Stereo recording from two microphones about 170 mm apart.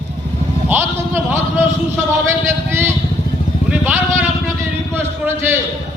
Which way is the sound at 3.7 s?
10° right (ahead or behind).